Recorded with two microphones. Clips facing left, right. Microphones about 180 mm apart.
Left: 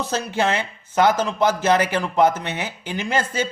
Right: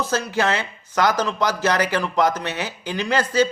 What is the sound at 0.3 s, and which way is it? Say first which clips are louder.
Speech: even; 25° left (ahead or behind).